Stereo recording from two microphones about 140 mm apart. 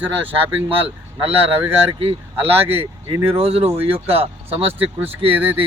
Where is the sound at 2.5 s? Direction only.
15° right (ahead or behind).